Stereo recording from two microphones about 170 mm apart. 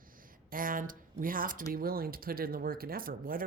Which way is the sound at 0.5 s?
55° right (ahead or behind).